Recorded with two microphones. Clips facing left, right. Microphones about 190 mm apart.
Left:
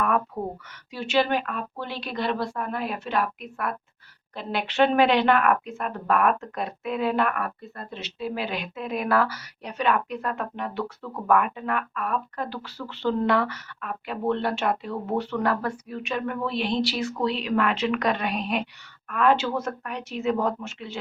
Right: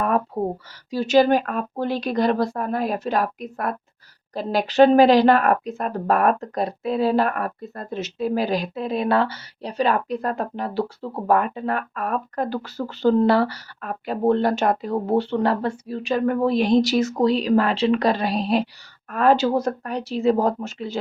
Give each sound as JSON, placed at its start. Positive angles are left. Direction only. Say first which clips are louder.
{"t": 0.3, "sound": "speech", "louder": "right 6 dB", "side_deg": -30}